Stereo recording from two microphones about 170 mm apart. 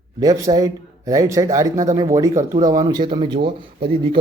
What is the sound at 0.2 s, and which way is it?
Speech, 20° right (ahead or behind).